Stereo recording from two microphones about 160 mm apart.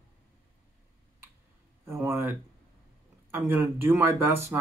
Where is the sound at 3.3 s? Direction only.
15° right (ahead or behind).